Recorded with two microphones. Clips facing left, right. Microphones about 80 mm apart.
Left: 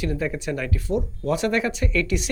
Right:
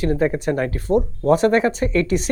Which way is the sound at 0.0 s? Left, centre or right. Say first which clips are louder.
Right 7 dB; right.